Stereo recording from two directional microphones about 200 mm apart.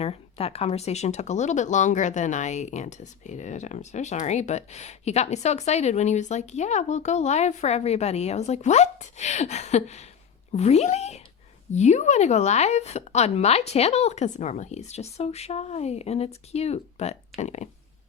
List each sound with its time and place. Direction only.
0.0 s speech: 30° left (ahead or behind)